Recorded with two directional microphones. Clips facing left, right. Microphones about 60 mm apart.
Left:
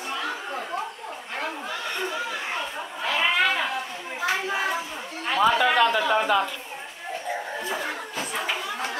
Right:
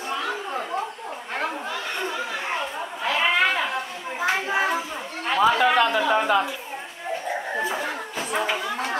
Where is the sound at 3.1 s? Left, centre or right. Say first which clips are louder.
Right 2 dB; centre.